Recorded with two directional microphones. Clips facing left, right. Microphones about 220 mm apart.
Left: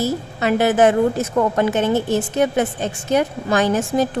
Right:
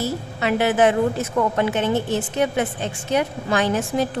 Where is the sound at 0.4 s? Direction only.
45° left (ahead or behind).